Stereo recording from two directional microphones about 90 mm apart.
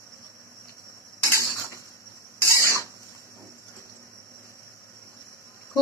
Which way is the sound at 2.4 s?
35° right (ahead or behind).